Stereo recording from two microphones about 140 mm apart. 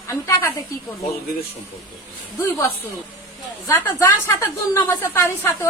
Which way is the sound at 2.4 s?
20° left (ahead or behind).